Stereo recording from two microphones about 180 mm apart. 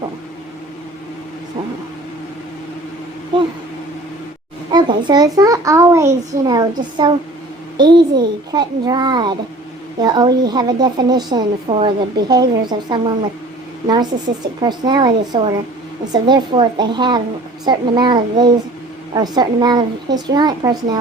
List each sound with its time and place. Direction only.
4.7 s a child's voice: 25° right (ahead or behind)